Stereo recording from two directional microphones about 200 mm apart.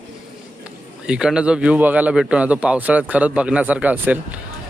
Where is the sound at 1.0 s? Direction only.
5° right (ahead or behind).